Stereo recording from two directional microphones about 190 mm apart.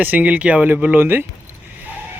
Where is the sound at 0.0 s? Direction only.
10° right (ahead or behind).